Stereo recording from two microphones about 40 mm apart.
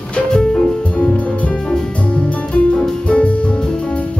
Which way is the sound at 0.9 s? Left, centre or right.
Left.